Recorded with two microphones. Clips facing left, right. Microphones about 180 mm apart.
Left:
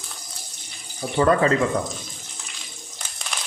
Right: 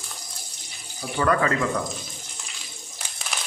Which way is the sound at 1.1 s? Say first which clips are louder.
Left 4 dB; 30° left (ahead or behind).